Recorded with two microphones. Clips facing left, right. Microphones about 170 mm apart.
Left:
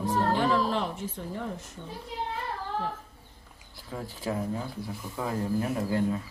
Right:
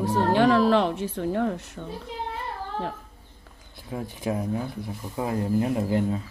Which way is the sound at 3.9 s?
20° right (ahead or behind).